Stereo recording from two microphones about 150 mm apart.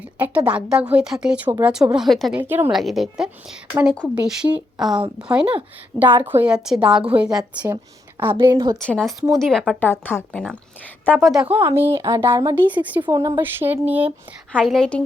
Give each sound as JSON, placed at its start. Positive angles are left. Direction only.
{"t": 0.0, "sound": "speech", "side_deg": -10}
{"t": 8.4, "sound": "a woman's voice", "side_deg": -25}
{"t": 8.8, "sound": "speech", "side_deg": 5}
{"t": 9.9, "sound": "speech", "side_deg": 15}
{"t": 11.2, "sound": "speech", "side_deg": -5}
{"t": 13.1, "sound": "speech", "side_deg": -25}
{"t": 14.5, "sound": "speech", "side_deg": 5}